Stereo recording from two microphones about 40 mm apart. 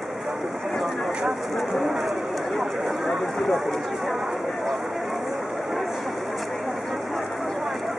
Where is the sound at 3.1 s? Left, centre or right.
Centre.